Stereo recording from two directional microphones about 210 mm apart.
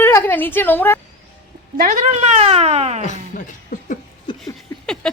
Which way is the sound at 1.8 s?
40° right (ahead or behind).